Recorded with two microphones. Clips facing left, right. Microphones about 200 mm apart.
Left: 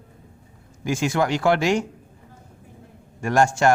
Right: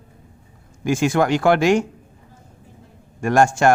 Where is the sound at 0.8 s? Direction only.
55° right (ahead or behind).